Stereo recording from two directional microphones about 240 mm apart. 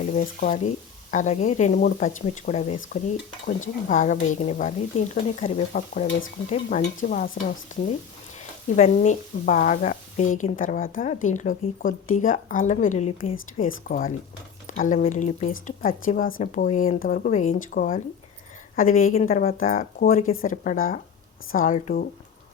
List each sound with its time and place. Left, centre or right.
0.1 s speech: left
8.7 s speech: left